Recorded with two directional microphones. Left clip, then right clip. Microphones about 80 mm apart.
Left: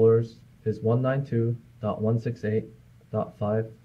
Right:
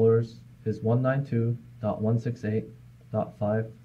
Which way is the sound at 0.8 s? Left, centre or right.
Centre.